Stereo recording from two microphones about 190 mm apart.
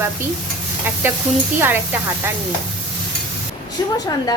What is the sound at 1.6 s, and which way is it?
Speech, 10° right (ahead or behind).